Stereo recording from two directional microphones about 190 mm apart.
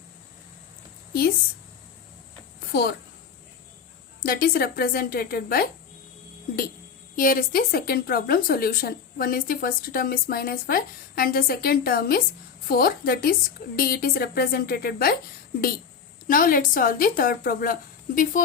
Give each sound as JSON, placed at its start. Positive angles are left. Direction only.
{"t": 4.2, "sound": "a woman's voice", "side_deg": 50}
{"t": 7.2, "sound": "a woman's voice", "side_deg": 50}
{"t": 16.2, "sound": "a woman's voice", "side_deg": 50}